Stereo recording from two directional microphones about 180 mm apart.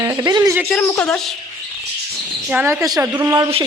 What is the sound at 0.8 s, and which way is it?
Speech, 10° left (ahead or behind).